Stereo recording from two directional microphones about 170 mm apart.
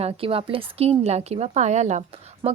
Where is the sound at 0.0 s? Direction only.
35° right (ahead or behind).